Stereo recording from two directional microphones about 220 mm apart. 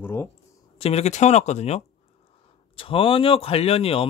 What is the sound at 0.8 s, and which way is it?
Speech, 30° left (ahead or behind).